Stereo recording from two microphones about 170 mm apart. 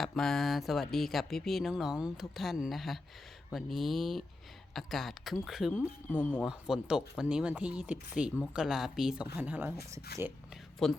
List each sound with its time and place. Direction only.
0.0 s speech: 5° left (ahead or behind)
10.1 s speech: 65° left (ahead or behind)
10.8 s speech: centre (ahead or behind)